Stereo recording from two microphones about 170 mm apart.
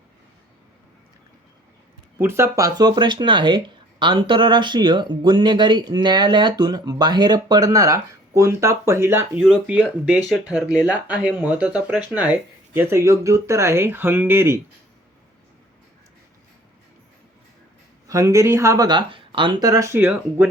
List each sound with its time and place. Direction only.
2.1 s speech: 15° right (ahead or behind)
18.1 s speech: 20° right (ahead or behind)